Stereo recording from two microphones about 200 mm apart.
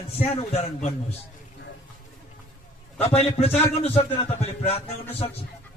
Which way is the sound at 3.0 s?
30° left (ahead or behind).